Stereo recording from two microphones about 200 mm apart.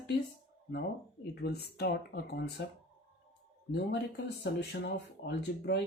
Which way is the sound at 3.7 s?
55° left (ahead or behind).